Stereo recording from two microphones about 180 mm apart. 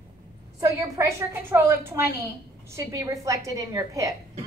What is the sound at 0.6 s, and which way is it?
A woman's voice, 15° right (ahead or behind).